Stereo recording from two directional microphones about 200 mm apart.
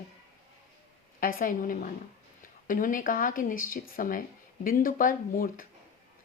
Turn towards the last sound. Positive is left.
turn(degrees=45)  # may be behind; listen again after turning